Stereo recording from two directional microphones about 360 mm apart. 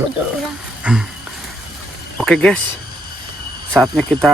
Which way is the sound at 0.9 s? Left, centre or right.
Centre.